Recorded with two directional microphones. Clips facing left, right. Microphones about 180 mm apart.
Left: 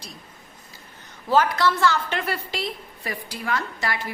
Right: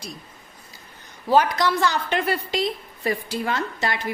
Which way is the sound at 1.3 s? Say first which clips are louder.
Right 1 dB; 15° right (ahead or behind).